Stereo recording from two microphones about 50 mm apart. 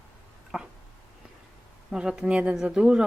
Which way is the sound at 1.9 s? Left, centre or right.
Centre.